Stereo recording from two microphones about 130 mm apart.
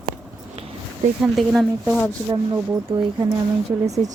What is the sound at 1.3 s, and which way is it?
Speech, centre (ahead or behind).